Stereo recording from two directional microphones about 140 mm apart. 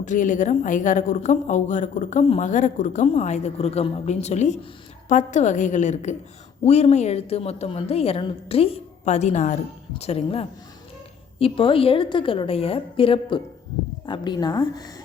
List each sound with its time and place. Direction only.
0.0 s a woman's voice: 65° left (ahead or behind)
10.0 s a woman's voice: 45° left (ahead or behind); by 14.8 s 30° left (ahead or behind)